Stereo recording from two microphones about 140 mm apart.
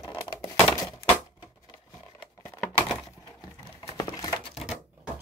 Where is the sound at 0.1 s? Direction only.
20° left (ahead or behind).